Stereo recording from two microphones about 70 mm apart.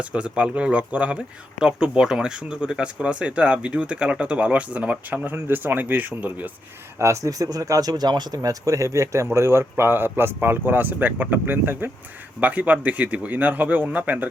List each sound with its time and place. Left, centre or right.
0.0 s speech: centre
7.0 s speech: right